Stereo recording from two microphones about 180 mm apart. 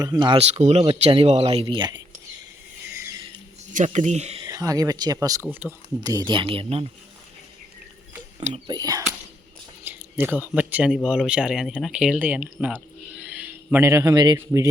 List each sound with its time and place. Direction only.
0.0 s speech: 25° right (ahead or behind)
1.6 s speech: 25° right (ahead or behind)
2.9 s a sound: 15° right (ahead or behind)
3.7 s speech: 45° right (ahead or behind)
4.4 s speech: 20° right (ahead or behind)
6.0 s speech: 20° right (ahead or behind)
8.6 s speech: 20° right (ahead or behind)